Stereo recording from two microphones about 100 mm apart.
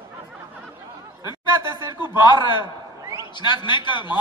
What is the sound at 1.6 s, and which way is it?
Speech, 45° left (ahead or behind).